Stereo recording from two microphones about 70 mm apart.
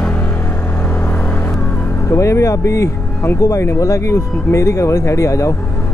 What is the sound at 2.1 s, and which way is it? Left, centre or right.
Speech, left.